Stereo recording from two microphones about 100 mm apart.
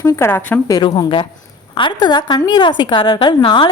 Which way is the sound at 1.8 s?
50° left (ahead or behind).